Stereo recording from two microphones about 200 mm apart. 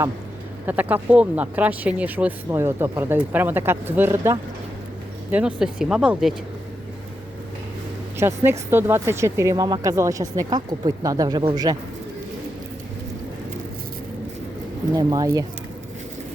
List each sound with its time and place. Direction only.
0.6 s speech: 10° right (ahead or behind)
8.2 s speech: 10° right (ahead or behind)
14.9 s speech: 15° right (ahead or behind)